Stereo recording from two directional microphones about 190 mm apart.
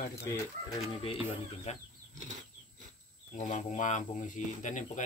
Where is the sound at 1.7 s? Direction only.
35° left (ahead or behind).